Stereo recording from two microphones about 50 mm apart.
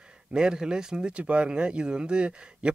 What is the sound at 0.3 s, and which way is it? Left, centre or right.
Speech, centre.